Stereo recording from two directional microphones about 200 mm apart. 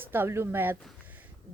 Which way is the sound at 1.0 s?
10° right (ahead or behind).